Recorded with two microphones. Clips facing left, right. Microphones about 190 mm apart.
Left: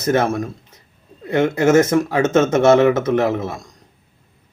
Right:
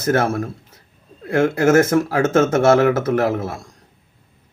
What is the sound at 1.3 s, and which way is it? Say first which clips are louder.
A man's voice: even; 5° right (ahead or behind).